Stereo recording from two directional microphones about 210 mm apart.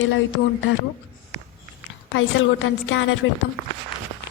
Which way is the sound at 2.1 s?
65° left (ahead or behind).